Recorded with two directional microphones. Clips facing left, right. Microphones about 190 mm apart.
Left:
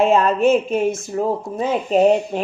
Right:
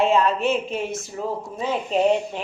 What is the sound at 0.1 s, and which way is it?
Speech, 45° left (ahead or behind).